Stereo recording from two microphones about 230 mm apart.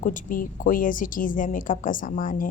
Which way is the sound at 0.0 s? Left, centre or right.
Left.